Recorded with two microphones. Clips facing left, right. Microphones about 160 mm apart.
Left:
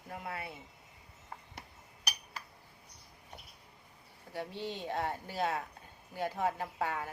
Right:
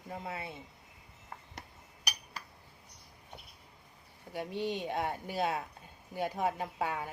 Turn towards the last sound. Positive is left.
turn(degrees=-15)  # may be behind; listen again after turning